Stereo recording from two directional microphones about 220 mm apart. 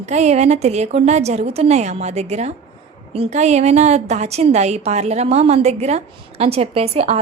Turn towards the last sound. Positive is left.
turn(degrees=-30)  # may be behind; listen again after turning